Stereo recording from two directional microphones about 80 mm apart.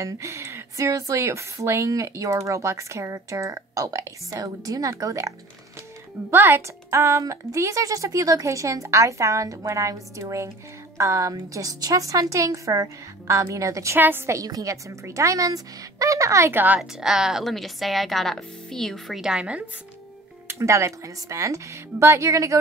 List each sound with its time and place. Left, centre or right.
0.0 s speech: right
6.3 s a woman's voice: right
13.9 s a woman's voice: right
14.4 s a woman's voice: right
16.5 s a woman's voice: right
17.0 s a woman's voice: centre
19.2 s a woman's voice: centre
20.4 s speech: right